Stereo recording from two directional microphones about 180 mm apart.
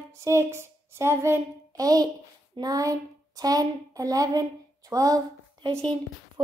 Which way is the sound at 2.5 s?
20° right (ahead or behind).